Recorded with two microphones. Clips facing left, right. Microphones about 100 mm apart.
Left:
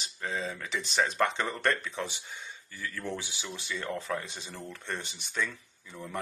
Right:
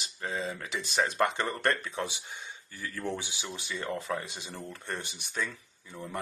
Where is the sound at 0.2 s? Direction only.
15° right (ahead or behind).